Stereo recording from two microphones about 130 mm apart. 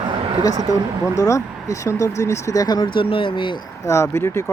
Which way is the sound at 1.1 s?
25° left (ahead or behind).